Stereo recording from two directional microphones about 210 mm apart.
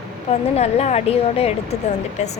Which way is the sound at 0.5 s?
30° left (ahead or behind).